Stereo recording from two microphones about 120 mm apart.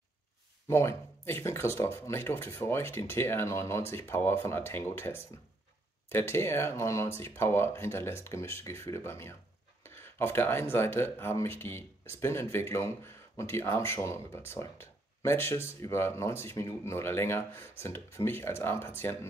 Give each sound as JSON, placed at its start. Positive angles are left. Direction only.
{"t": 0.7, "sound": "speech", "side_deg": 20}